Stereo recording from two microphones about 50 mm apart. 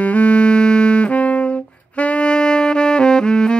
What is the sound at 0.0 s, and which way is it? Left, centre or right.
Saxophone, left.